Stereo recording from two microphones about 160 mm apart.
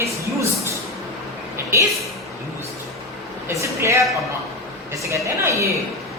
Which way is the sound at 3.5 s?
20° right (ahead or behind).